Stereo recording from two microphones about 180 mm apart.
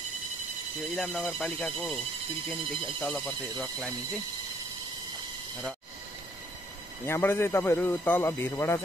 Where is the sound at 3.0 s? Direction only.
Centre (ahead or behind).